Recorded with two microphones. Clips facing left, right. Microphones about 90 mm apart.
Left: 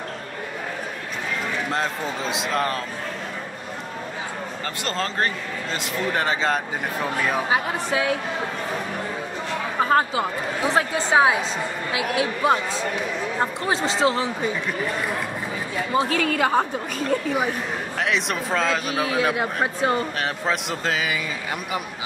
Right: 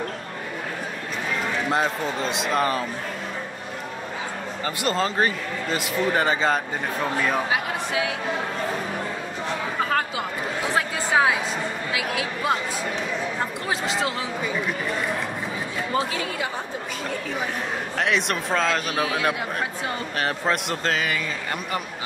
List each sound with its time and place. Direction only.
2.1 s speech: centre (ahead or behind)
4.8 s a man's voice: 5° right (ahead or behind)
7.5 s speech: 30° left (ahead or behind)
9.8 s chatter: 30° left (ahead or behind)
10.7 s speech: 25° left (ahead or behind)
13.7 s speech: 30° left (ahead or behind)
16.1 s a woman's voice: 55° left (ahead or behind)
17.9 s speech: centre (ahead or behind)
19.6 s speech: 35° left (ahead or behind)
20.2 s speech: centre (ahead or behind)